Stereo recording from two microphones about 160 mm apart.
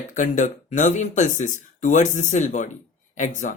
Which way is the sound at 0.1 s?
55° left (ahead or behind).